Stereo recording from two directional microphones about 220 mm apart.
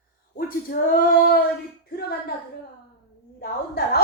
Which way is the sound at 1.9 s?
45° left (ahead or behind).